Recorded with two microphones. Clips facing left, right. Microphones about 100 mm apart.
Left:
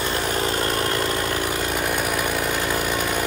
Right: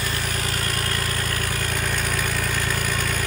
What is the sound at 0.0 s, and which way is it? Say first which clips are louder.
Vehicle: left 5 dB; 25° left (ahead or behind).